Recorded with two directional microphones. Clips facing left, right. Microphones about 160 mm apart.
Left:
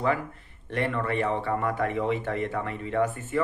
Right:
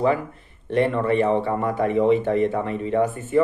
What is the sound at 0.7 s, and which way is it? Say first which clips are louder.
Speech: right 8 dB; 25° right (ahead or behind).